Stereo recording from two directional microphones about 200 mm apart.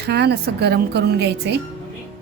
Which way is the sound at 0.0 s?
55° right (ahead or behind).